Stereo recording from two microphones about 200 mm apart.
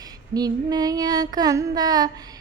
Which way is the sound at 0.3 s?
20° right (ahead or behind).